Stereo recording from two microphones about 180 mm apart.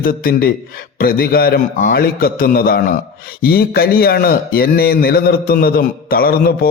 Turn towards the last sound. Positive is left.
turn(degrees=55)  # may be behind; listen again after turning